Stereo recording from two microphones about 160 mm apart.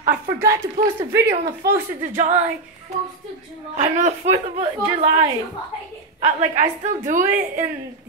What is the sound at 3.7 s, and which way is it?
A woman's voice, 45° right (ahead or behind).